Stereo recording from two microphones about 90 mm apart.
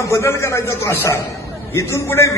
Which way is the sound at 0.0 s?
30° left (ahead or behind).